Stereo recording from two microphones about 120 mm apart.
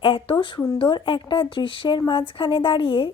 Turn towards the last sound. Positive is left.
turn(degrees=45)  # may be behind; listen again after turning